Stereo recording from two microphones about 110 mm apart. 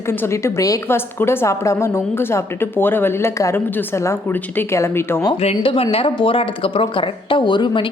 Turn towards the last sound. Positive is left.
turn(degrees=45)  # may be behind; listen again after turning